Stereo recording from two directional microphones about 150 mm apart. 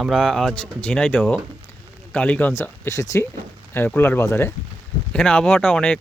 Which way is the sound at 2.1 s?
10° left (ahead or behind).